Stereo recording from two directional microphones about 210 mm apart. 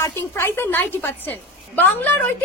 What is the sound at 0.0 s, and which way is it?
A woman's voice, 10° left (ahead or behind).